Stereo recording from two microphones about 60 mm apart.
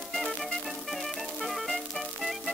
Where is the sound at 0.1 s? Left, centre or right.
Centre.